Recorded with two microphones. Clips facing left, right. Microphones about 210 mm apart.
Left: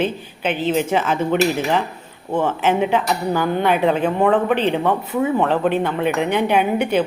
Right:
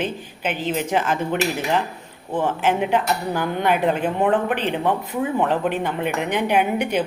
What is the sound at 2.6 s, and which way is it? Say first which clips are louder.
Speech: left 1 dB; 10° right (ahead or behind).